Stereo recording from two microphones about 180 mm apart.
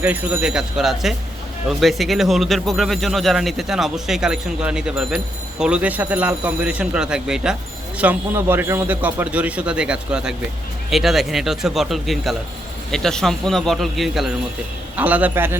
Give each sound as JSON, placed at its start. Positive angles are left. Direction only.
{"t": 0.0, "sound": "a man's voice", "side_deg": -10}